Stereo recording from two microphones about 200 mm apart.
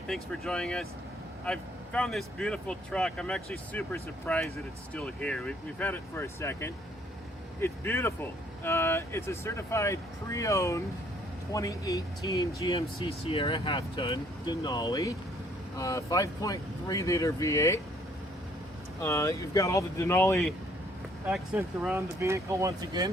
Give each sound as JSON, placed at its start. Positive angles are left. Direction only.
{"t": 0.1, "sound": "speech", "side_deg": 5}
{"t": 19.0, "sound": "speech", "side_deg": 15}
{"t": 21.2, "sound": "speech", "side_deg": -5}